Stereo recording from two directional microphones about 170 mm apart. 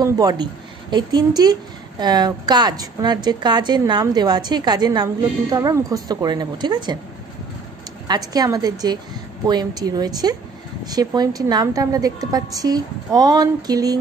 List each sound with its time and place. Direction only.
0.0 s a woman's voice: 20° right (ahead or behind)
8.1 s a woman's voice: 25° right (ahead or behind)